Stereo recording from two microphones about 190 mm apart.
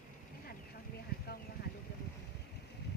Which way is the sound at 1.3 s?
55° left (ahead or behind).